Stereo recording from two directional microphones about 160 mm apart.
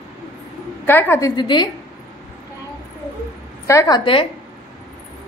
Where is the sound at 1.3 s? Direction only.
25° left (ahead or behind).